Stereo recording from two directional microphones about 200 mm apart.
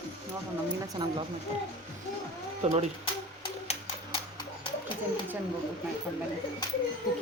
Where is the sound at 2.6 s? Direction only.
35° right (ahead or behind).